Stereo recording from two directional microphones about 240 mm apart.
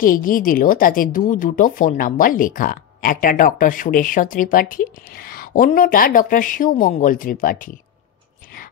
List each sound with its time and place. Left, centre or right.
0.0 s speech: left